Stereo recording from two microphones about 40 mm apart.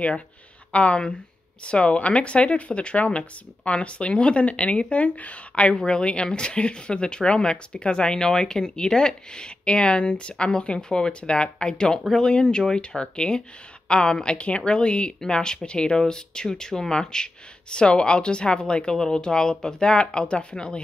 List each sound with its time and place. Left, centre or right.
0.7 s speech: left